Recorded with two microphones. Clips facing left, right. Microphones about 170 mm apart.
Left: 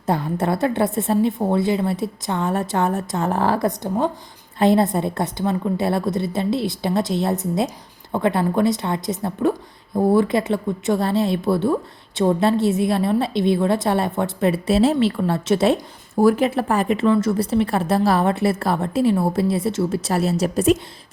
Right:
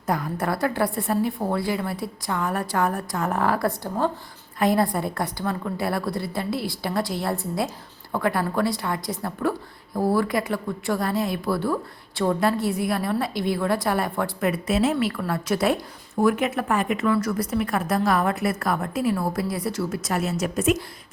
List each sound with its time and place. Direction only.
0.0 s a woman's voice: 30° left (ahead or behind)